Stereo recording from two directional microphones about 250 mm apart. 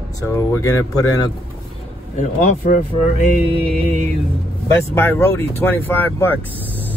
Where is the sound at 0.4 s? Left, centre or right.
Centre.